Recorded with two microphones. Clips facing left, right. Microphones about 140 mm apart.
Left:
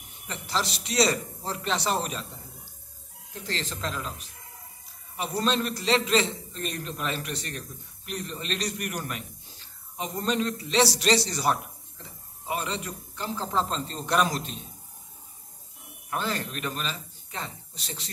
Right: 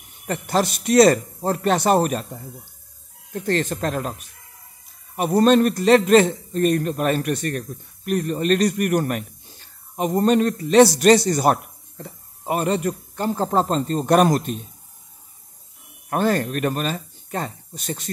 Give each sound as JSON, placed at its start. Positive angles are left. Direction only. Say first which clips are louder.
{"t": 0.3, "sound": "a man's voice", "louder": "right 9 dB", "side_deg": -50}
{"t": 3.3, "sound": "a man's voice", "louder": "right 12 dB", "side_deg": -55}
{"t": 16.1, "sound": "a man's voice", "louder": "right 10 dB", "side_deg": -50}